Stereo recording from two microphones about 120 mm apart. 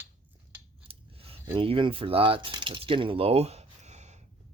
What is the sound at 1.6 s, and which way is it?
Speech, 45° right (ahead or behind).